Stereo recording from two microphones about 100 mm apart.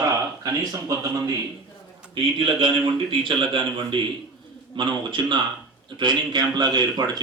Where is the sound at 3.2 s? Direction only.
55° right (ahead or behind).